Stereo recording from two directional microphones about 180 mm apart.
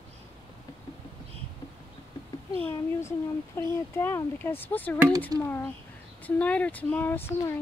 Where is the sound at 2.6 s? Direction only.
15° left (ahead or behind).